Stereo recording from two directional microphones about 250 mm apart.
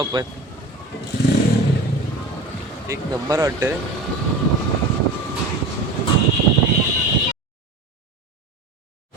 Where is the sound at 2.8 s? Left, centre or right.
Centre.